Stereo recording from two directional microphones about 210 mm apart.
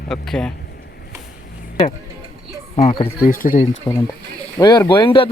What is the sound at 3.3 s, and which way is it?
Speech, 40° left (ahead or behind).